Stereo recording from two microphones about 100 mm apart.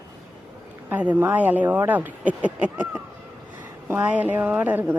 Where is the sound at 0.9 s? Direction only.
15° right (ahead or behind).